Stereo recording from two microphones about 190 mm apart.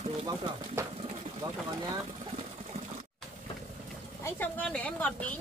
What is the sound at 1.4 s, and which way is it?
Speech, 15° right (ahead or behind).